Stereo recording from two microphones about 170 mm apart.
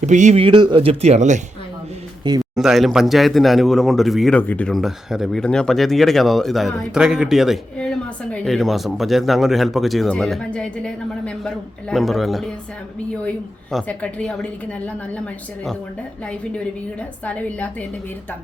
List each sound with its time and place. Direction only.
0.0 s speech: 45° right (ahead or behind)
0.4 s speech: 30° right (ahead or behind)
2.4 s a woman's voice: centre (ahead or behind)
17.0 s a woman's voice: 10° left (ahead or behind)